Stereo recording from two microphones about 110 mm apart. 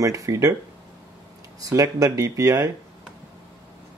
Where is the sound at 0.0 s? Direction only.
30° right (ahead or behind).